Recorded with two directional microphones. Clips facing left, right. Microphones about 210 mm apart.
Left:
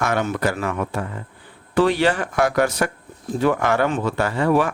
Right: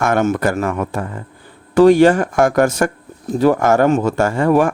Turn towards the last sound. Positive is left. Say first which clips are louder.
# right 5 dB
turn(degrees=-45)  # may be behind; listen again after turning